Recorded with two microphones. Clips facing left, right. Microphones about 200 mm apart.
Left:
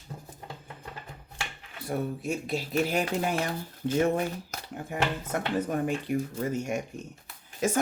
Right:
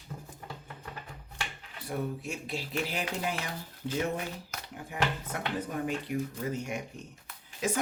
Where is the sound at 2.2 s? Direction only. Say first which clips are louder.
Left 6 dB; 40° left (ahead or behind).